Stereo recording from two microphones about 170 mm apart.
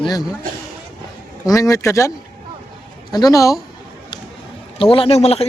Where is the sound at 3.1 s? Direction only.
20° left (ahead or behind).